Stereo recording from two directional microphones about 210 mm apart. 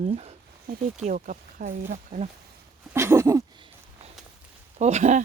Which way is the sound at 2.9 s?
10° right (ahead or behind).